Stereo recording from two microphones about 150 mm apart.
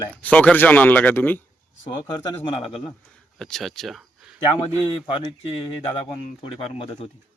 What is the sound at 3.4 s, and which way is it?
Speech, centre (ahead or behind).